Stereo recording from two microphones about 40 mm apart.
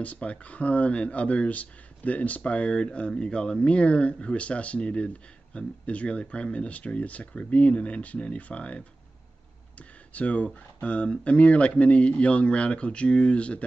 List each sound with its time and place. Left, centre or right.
0.0 s speech: left